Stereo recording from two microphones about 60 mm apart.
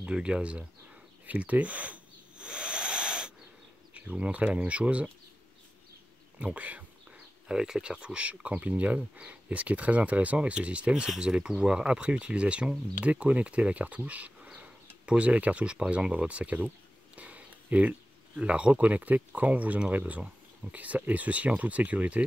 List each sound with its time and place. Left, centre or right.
0.0 s speech: centre
1.2 s a sound: right
3.9 s speech: right
6.4 s speech: right
7.4 s speech: centre
14.5 s a sound: right
18.4 s speech: right